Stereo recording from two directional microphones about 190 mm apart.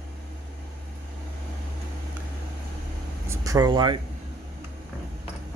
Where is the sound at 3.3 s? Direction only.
15° right (ahead or behind).